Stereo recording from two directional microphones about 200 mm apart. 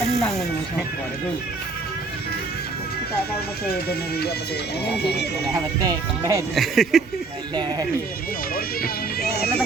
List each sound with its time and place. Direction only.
0.2 s a sound: centre (ahead or behind)
3.7 s speech: 55° left (ahead or behind)
5.9 s speech: 20° right (ahead or behind)
6.5 s speech: centre (ahead or behind)
7.5 s speech: 20° right (ahead or behind)
9.3 s speech: 50° left (ahead or behind)